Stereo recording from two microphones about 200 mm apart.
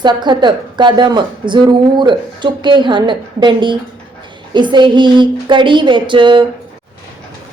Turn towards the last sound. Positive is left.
turn(degrees=-25)  # may be behind; listen again after turning